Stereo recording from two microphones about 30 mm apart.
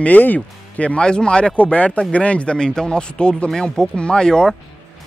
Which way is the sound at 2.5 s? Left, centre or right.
Left.